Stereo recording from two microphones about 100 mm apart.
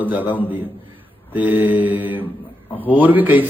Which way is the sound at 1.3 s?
20° right (ahead or behind).